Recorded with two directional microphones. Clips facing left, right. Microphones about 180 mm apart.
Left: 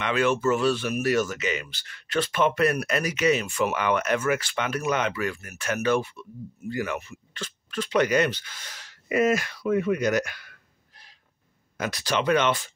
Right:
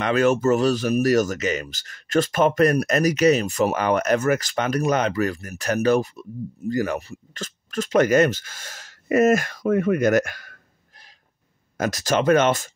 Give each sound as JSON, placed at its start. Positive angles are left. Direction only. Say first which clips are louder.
{"t": 0.0, "sound": "speech", "louder": "right 5 dB", "side_deg": -40}